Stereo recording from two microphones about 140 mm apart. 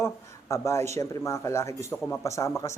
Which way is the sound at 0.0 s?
20° left (ahead or behind).